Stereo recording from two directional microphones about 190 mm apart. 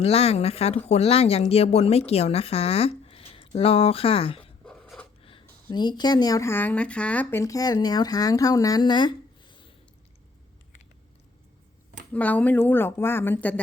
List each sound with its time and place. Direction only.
0.0 s speech: 30° left (ahead or behind)
4.6 s writing: 5° left (ahead or behind)
5.7 s speech: 20° left (ahead or behind)
12.1 s a woman's voice: 10° left (ahead or behind)